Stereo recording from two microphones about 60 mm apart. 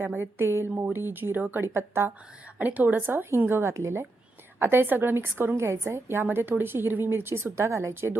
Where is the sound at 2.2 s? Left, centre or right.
Centre.